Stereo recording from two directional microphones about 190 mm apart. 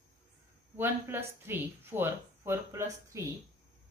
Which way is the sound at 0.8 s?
10° right (ahead or behind).